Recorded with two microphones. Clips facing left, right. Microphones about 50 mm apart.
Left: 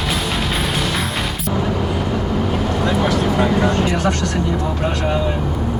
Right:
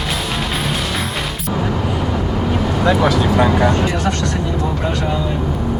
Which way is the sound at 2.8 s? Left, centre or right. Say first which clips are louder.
Right 4 dB; right.